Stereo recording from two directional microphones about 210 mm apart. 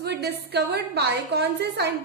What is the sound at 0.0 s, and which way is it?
A woman's voice, 50° right (ahead or behind).